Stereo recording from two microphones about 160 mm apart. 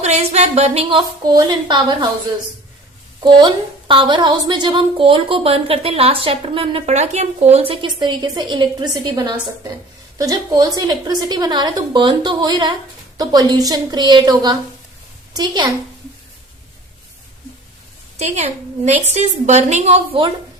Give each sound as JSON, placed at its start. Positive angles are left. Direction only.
{"t": 0.0, "sound": "a woman's voice", "side_deg": -45}
{"t": 3.2, "sound": "a woman's voice", "side_deg": -30}
{"t": 18.2, "sound": "a woman's voice", "side_deg": -45}